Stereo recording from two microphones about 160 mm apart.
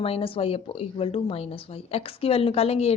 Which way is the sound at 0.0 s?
35° left (ahead or behind).